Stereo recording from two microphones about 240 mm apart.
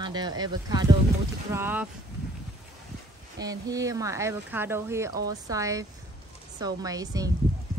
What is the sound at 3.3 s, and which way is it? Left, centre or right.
A man's voice, centre.